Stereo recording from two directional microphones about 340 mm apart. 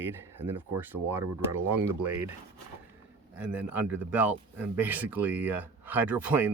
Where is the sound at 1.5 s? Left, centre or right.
Right.